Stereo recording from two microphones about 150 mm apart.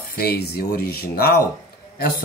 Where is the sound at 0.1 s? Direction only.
90° left.